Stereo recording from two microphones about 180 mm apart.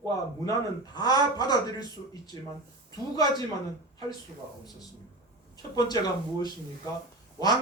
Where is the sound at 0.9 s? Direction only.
20° left (ahead or behind).